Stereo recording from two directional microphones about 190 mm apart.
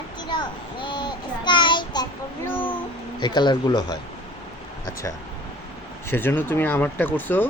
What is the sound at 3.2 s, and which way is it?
Speech, 25° left (ahead or behind).